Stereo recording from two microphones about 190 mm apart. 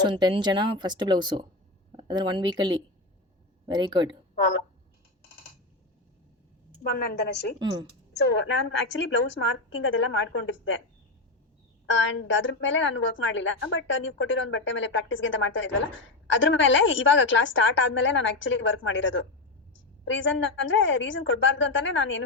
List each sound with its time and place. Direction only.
0.0 s speech: 25° right (ahead or behind)
6.8 s a woman's voice: 55° left (ahead or behind)
8.1 s a woman's voice: 65° left (ahead or behind)
11.9 s a woman's voice: 75° left (ahead or behind)